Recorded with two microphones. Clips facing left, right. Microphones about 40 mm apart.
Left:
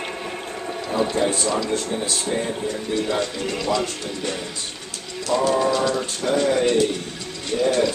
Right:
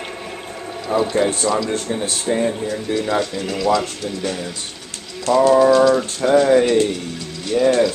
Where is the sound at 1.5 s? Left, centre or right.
Centre.